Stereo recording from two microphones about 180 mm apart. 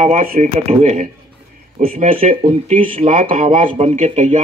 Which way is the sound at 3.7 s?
35° right (ahead or behind).